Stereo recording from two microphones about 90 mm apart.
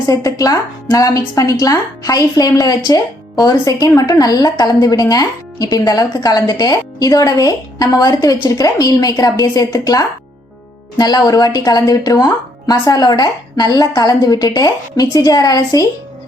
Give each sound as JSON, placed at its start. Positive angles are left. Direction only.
{"t": 0.1, "sound": "speech", "side_deg": 40}